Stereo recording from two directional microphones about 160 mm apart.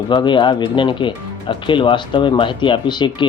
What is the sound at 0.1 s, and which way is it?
Speech, 30° left (ahead or behind).